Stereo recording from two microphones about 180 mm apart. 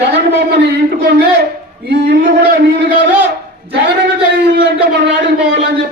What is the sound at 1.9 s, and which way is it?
Speech, 70° right (ahead or behind).